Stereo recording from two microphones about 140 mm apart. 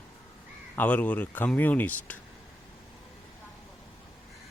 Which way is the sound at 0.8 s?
10° left (ahead or behind).